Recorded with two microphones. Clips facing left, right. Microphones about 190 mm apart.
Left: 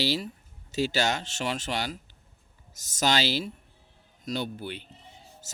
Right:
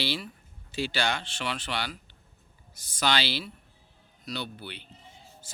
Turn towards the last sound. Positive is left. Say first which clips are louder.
# left 3 dB
turn(degrees=45)  # may be behind; listen again after turning